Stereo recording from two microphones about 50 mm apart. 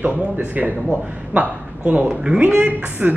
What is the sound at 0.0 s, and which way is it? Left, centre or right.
A man's voice, right.